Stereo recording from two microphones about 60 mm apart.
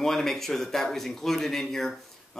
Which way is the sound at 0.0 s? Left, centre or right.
Centre.